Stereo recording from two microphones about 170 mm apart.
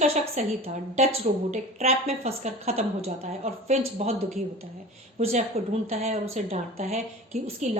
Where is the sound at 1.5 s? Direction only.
40° right (ahead or behind).